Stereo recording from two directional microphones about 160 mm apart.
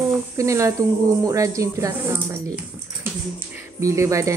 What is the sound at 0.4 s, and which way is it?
A woman's voice, 20° right (ahead or behind).